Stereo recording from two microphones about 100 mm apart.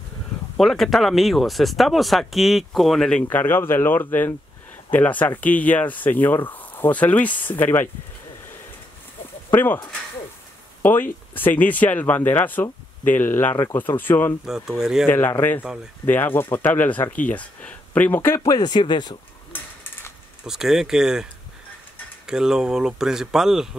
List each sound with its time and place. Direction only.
0.6 s speech: 5° left (ahead or behind)
3.3 s speech: 20° left (ahead or behind)
9.5 s speech: 20° left (ahead or behind)
10.8 s speech: 20° left (ahead or behind)
14.4 s speech: 5° right (ahead or behind)
15.0 s speech: 20° left (ahead or behind)
18.4 s speech: 40° left (ahead or behind)
19.5 s a sound: 20° left (ahead or behind)
20.4 s speech: 5° right (ahead or behind)